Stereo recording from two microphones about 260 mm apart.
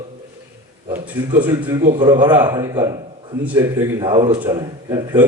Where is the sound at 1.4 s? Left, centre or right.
Centre.